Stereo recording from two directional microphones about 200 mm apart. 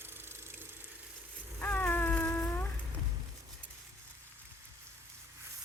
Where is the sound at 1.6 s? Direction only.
10° left (ahead or behind).